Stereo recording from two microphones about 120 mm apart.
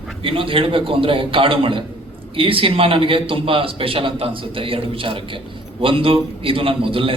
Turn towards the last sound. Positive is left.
turn(degrees=-50)  # may be behind; listen again after turning